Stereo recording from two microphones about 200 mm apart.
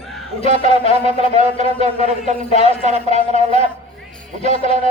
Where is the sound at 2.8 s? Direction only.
35° right (ahead or behind).